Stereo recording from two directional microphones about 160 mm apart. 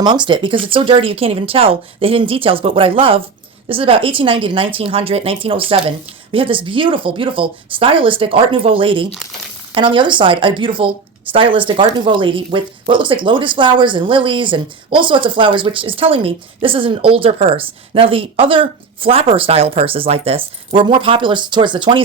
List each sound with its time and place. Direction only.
0.0 s speech: 30° right (ahead or behind)